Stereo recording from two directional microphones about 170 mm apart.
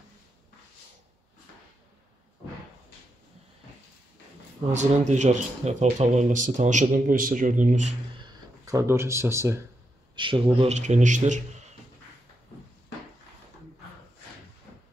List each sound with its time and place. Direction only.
4.7 s speech: 45° right (ahead or behind)
8.2 s a sound: 20° right (ahead or behind)
10.1 s speech: 30° right (ahead or behind); by 11.4 s 45° right (ahead or behind)